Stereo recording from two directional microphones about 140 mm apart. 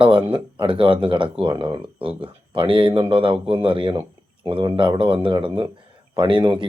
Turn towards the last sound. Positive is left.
turn(degrees=-35)  # may be behind; listen again after turning